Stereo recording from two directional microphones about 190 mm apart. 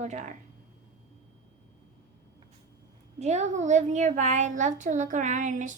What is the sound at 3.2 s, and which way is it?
A woman's voice, 35° right (ahead or behind).